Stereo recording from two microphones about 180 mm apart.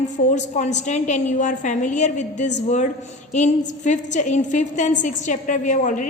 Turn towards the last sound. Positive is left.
turn(degrees=45)  # may be behind; listen again after turning